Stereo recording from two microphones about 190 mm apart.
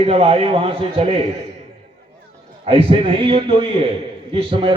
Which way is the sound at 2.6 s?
30° right (ahead or behind).